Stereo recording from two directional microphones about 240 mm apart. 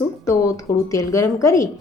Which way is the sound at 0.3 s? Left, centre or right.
Centre.